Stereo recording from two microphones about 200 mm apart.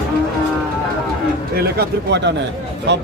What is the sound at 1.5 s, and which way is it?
Speech, 55° right (ahead or behind).